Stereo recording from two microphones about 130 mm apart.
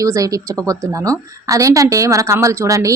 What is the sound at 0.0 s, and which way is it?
Speech, 25° right (ahead or behind).